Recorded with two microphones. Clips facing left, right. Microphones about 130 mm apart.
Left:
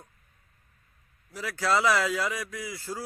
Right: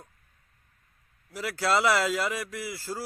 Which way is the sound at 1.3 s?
10° right (ahead or behind).